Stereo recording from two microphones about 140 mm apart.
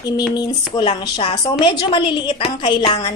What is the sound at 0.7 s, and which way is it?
A woman's voice, 30° left (ahead or behind).